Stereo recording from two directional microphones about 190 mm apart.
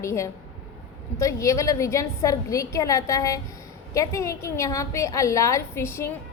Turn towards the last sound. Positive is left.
turn(degrees=15)  # may be behind; listen again after turning